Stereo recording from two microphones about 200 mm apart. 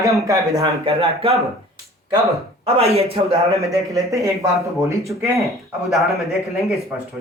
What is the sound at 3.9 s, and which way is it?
Speech, 15° right (ahead or behind).